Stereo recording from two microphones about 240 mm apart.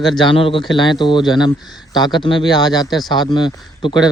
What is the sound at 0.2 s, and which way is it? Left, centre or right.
Speech, left.